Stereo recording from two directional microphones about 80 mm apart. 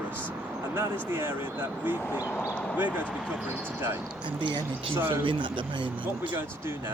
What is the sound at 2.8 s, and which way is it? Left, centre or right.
Speech, right.